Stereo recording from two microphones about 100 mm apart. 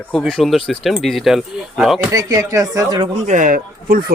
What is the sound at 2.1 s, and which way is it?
Speech, 40° right (ahead or behind).